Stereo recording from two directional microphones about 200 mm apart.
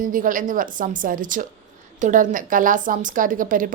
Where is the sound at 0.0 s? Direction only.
40° right (ahead or behind).